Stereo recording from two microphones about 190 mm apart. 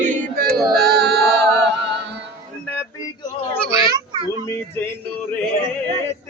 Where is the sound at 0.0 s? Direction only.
50° right (ahead or behind).